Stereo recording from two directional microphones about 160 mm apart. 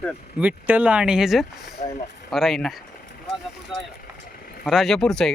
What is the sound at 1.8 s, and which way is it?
Speech, 65° left (ahead or behind).